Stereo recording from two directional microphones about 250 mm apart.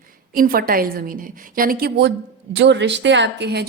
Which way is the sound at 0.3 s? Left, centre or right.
Right.